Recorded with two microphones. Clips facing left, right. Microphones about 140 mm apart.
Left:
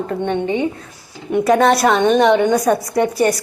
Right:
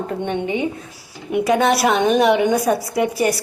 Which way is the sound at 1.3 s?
Centre (ahead or behind).